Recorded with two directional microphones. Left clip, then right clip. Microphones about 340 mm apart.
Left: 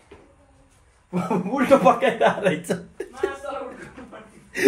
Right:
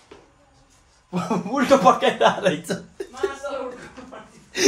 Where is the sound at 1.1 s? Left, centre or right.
Centre.